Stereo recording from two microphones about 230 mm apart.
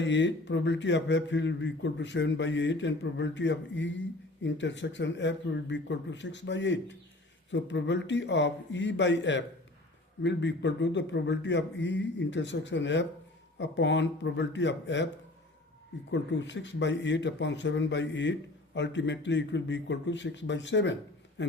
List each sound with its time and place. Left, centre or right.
0.0 s speech: left
16.1 s speech: left